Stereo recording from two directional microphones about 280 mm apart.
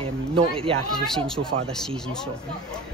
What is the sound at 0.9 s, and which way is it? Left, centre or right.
Speech, centre.